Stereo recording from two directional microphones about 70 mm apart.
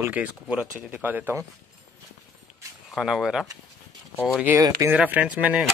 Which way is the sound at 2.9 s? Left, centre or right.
Centre.